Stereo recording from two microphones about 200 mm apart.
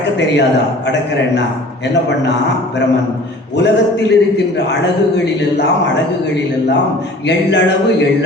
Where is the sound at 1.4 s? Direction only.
60° left (ahead or behind).